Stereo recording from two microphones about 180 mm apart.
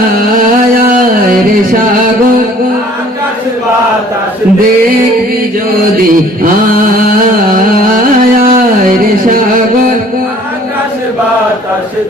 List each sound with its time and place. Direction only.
0.3 s music: 50° right (ahead or behind)
6.4 s mantra: 50° right (ahead or behind)
8.4 s a sound: 50° right (ahead or behind)